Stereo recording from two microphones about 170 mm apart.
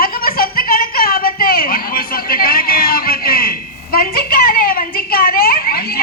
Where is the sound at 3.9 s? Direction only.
60° left (ahead or behind).